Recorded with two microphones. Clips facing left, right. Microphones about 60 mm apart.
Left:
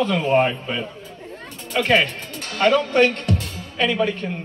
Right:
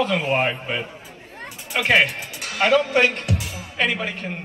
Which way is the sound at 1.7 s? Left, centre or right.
Centre.